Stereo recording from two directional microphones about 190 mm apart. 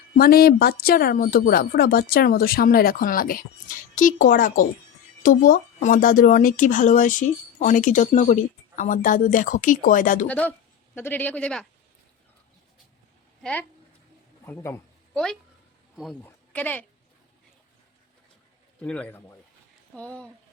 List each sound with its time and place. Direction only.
0.2 s speech: 50° left (ahead or behind)
10.2 s a man's voice: 5° left (ahead or behind)
13.4 s speech: 5° left (ahead or behind)
14.4 s a sound: 10° left (ahead or behind)
16.2 s a sound: 10° left (ahead or behind)
18.8 s a man's voice: 5° left (ahead or behind)